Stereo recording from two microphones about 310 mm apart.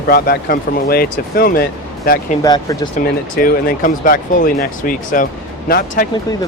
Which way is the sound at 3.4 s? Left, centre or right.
Left.